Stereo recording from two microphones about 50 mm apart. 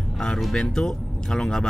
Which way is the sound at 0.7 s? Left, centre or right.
Centre.